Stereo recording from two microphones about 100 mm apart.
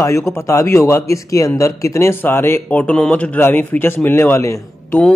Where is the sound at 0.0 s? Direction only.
30° left (ahead or behind).